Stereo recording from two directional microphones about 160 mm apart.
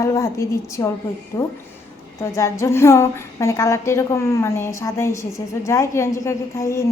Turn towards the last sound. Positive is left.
turn(degrees=15)  # may be behind; listen again after turning